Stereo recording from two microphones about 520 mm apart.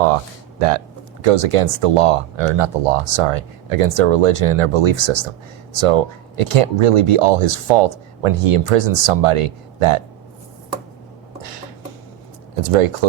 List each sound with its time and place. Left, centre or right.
1.2 s speech: right
5.7 s speech: right
12.6 s speech: right